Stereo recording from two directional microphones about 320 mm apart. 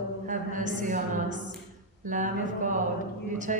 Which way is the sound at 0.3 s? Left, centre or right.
Right.